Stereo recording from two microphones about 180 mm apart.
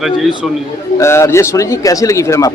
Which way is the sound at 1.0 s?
15° left (ahead or behind).